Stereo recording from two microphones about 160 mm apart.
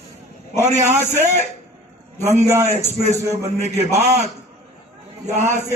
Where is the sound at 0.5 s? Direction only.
45° right (ahead or behind).